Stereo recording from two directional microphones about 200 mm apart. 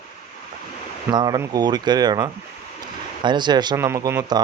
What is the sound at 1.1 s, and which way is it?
Speech, 20° right (ahead or behind).